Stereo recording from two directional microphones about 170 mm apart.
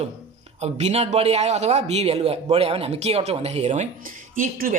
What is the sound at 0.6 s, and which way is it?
A man's voice, 40° right (ahead or behind).